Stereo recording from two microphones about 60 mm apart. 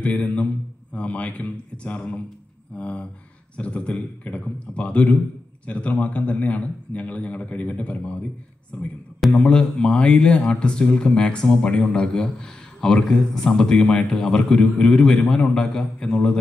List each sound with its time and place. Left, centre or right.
0.0 s a man's voice: centre